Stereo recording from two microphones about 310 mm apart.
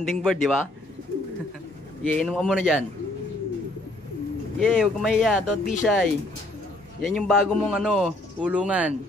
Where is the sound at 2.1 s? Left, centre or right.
Centre.